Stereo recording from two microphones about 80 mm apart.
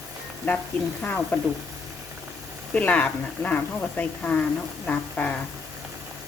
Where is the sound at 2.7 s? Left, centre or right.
Centre.